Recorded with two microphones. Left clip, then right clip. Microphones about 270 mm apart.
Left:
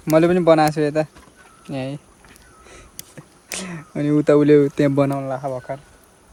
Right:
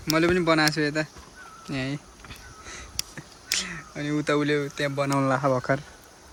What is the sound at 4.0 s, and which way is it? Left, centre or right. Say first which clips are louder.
Speech: left 10 dB; centre.